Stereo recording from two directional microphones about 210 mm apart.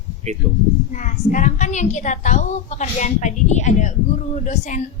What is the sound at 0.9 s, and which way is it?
A woman's voice, 35° left (ahead or behind).